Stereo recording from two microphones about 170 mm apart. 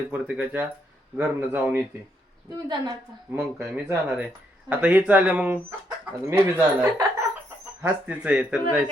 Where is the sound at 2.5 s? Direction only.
25° right (ahead or behind).